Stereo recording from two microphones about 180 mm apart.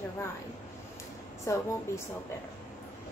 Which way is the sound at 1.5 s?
15° left (ahead or behind).